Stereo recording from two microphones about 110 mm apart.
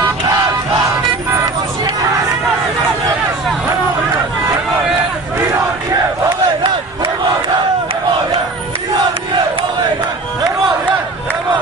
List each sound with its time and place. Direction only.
6.2 s battle cry: 45° right (ahead or behind)